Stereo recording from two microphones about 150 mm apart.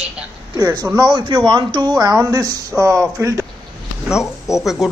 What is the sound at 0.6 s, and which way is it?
A man's voice, 25° right (ahead or behind).